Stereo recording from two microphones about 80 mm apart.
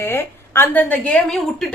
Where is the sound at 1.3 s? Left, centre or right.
Centre.